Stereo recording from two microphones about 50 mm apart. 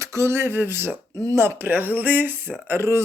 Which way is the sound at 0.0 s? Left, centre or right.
Right.